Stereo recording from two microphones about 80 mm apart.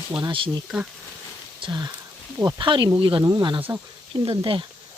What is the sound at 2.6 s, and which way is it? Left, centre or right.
Speech, right.